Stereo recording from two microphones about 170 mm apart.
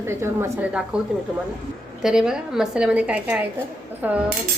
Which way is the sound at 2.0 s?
5° right (ahead or behind).